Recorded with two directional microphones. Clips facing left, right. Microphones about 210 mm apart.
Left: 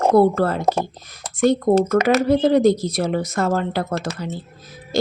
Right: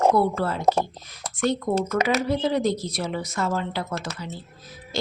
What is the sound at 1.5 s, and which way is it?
A woman's voice, 45° left (ahead or behind).